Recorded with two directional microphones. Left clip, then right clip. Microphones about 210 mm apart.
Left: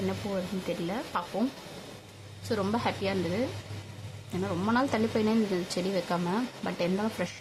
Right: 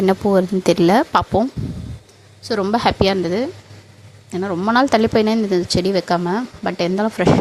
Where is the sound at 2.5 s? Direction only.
35° right (ahead or behind).